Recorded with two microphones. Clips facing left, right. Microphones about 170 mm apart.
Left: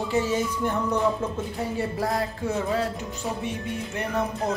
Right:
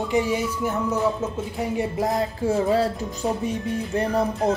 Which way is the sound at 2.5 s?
35° right (ahead or behind).